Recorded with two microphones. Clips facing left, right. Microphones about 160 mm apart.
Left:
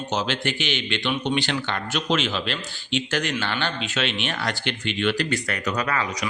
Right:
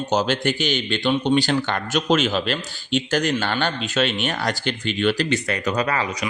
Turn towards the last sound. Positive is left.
turn(degrees=-30)  # may be behind; listen again after turning